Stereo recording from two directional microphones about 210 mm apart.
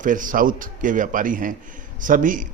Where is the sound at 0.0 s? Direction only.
40° right (ahead or behind).